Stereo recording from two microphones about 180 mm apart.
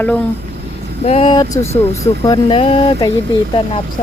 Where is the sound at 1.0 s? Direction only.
35° left (ahead or behind).